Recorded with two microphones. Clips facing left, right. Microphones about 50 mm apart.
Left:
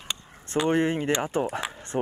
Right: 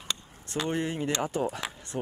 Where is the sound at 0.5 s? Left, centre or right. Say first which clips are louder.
Left 7 dB; left.